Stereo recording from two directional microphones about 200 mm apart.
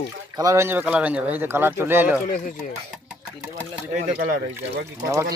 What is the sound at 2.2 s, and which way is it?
Speech, 40° left (ahead or behind).